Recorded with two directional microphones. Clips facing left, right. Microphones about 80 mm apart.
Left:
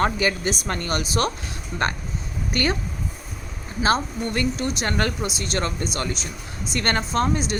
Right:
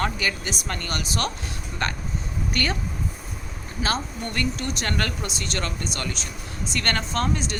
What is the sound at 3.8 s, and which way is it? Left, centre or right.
Speech, centre.